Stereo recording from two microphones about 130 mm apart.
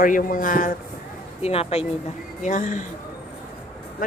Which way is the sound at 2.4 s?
75° left (ahead or behind).